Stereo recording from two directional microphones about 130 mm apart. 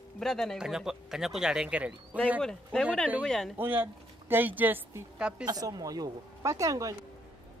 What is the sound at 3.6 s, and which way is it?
Speech, 15° right (ahead or behind).